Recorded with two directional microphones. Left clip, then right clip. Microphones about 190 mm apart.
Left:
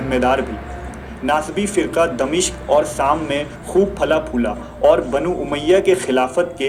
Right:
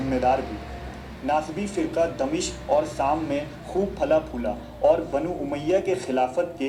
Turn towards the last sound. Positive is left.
turn(degrees=45)  # may be behind; listen again after turning